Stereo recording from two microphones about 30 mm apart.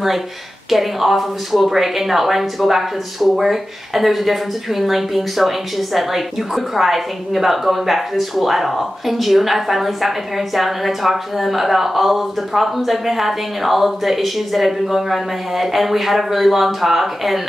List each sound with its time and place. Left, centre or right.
0.7 s speech: centre